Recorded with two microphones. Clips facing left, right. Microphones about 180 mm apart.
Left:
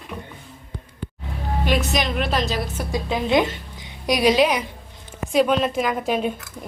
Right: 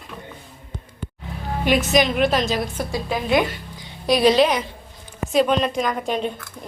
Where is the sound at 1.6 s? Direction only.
Centre (ahead or behind).